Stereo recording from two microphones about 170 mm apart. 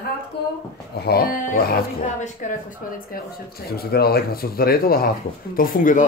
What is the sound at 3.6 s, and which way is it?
Speech, 65° left (ahead or behind).